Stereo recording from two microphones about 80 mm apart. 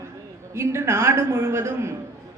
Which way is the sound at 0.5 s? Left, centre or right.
Right.